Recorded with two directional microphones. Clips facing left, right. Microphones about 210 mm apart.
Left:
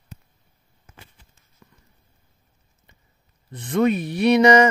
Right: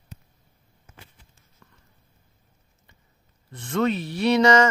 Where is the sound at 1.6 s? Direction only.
15° left (ahead or behind).